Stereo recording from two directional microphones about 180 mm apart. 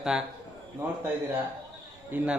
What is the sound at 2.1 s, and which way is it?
Speech, 10° right (ahead or behind).